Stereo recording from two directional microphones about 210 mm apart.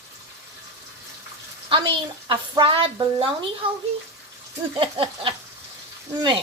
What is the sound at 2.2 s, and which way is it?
A woman's voice, 25° right (ahead or behind).